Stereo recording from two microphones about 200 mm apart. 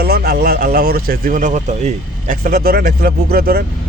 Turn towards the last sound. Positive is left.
turn(degrees=-50)  # may be behind; listen again after turning